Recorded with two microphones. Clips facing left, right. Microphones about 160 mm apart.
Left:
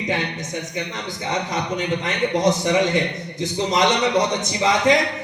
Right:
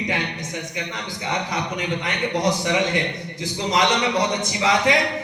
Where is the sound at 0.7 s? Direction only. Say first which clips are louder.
Left 2 dB; 20° left (ahead or behind).